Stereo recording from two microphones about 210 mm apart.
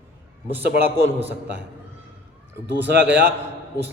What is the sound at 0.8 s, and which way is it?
Speech, 10° right (ahead or behind).